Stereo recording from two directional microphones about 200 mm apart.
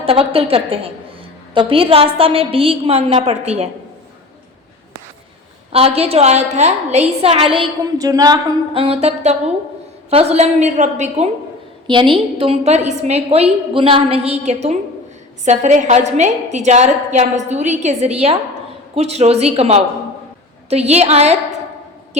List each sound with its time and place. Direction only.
0.0 s a woman's voice: 30° right (ahead or behind)
5.7 s a woman's voice: 30° right (ahead or behind)
11.9 s a woman's voice: 25° right (ahead or behind)